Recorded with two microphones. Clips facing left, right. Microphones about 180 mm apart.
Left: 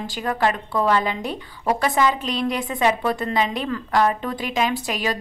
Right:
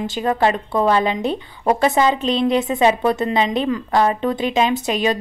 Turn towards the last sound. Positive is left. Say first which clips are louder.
# right 5 dB
turn(degrees=-25)  # may be behind; listen again after turning